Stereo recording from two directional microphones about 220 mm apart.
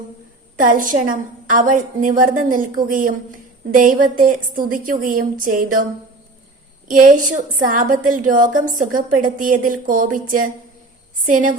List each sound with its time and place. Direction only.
0.6 s a woman's voice: 40° right (ahead or behind)
6.8 s a woman's voice: 35° right (ahead or behind)